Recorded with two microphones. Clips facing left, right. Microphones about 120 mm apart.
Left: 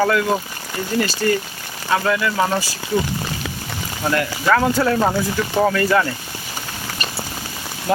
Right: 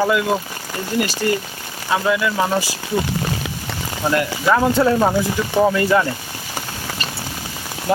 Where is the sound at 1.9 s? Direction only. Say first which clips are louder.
Even; 10° right (ahead or behind).